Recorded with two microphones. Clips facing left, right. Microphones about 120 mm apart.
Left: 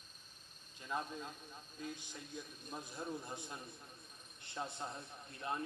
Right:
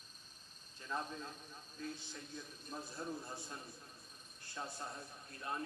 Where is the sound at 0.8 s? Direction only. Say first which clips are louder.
Left 1 dB; 15° left (ahead or behind).